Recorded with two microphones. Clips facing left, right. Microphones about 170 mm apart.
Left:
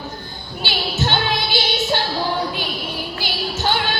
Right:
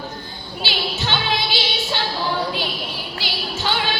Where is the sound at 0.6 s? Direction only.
50° left (ahead or behind).